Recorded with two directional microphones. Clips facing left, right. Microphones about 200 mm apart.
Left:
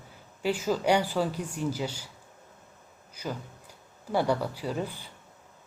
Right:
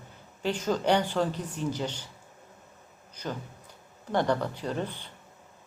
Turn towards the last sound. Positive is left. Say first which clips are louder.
# even
turn(degrees=10)  # may be behind; listen again after turning